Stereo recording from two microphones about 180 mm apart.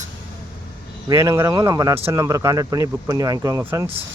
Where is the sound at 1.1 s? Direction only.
15° right (ahead or behind).